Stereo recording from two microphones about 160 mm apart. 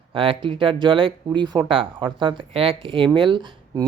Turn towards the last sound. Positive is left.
turn(degrees=-30)  # may be behind; listen again after turning